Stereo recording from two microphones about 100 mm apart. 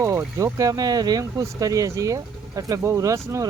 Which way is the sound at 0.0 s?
35° right (ahead or behind).